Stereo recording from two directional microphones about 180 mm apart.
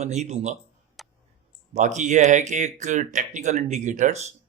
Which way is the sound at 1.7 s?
40° right (ahead or behind).